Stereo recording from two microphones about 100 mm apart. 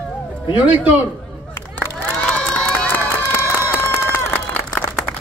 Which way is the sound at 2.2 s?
10° left (ahead or behind).